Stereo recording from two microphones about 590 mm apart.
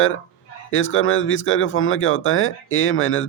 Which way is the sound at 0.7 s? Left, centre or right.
Centre.